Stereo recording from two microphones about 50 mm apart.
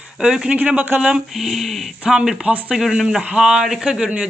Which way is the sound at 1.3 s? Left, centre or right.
Centre.